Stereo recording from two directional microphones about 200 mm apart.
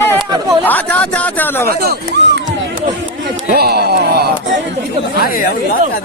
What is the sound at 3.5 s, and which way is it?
Speech, 50° right (ahead or behind).